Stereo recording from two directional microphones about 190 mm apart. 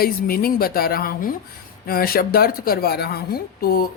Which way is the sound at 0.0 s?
50° left (ahead or behind).